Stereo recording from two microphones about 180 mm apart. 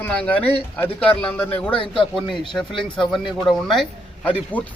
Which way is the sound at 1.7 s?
30° left (ahead or behind).